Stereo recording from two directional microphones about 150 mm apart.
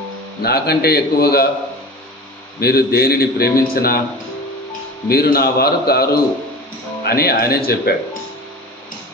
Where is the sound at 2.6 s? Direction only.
90° left.